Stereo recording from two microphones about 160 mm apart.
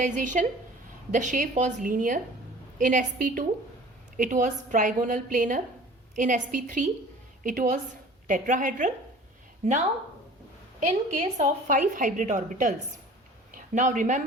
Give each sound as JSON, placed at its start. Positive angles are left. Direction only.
{"t": 0.0, "sound": "a woman's voice", "side_deg": -55}